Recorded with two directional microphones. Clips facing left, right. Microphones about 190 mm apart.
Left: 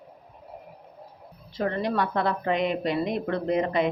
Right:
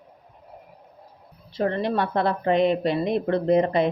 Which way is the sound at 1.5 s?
30° right (ahead or behind).